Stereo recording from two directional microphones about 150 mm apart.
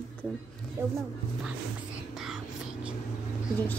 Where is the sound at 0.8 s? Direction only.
15° right (ahead or behind).